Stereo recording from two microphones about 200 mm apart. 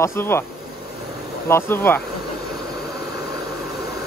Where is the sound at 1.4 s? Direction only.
10° left (ahead or behind).